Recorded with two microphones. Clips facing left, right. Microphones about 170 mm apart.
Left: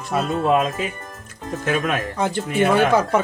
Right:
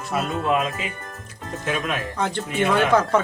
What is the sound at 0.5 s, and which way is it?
Speech, 40° left (ahead or behind).